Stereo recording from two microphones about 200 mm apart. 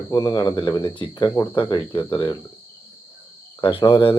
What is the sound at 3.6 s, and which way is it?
Speech, 25° left (ahead or behind).